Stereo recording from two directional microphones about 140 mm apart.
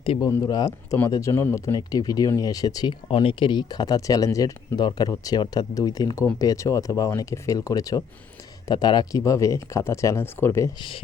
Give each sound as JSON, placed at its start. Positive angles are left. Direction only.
{"t": 0.2, "sound": "speech", "side_deg": 25}